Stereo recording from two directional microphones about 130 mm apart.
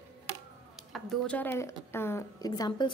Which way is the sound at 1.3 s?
15° left (ahead or behind).